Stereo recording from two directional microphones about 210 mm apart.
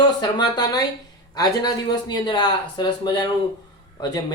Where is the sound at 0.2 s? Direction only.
20° left (ahead or behind).